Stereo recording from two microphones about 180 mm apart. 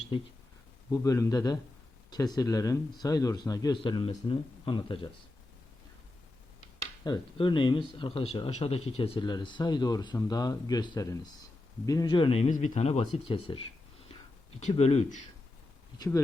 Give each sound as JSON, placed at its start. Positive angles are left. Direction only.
{"t": 0.9, "sound": "speech", "side_deg": 20}
{"t": 7.0, "sound": "speech", "side_deg": 25}
{"t": 14.6, "sound": "speech", "side_deg": 35}
{"t": 16.0, "sound": "speech", "side_deg": 15}